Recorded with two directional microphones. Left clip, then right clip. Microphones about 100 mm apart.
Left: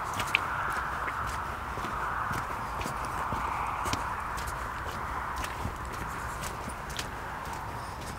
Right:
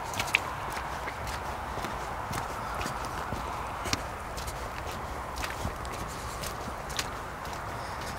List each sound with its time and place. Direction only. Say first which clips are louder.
0.3 s walk: right 1 dB; 35° right (ahead or behind)